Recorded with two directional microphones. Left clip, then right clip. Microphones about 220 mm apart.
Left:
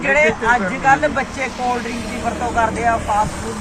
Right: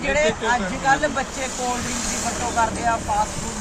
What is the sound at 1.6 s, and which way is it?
Speech, 35° right (ahead or behind).